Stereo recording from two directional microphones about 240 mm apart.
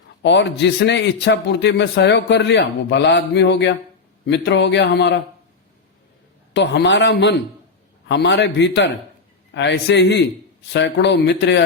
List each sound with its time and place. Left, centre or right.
0.2 s a man's voice: left
6.5 s a man's voice: left